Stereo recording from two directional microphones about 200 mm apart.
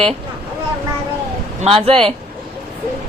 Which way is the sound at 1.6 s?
30° right (ahead or behind).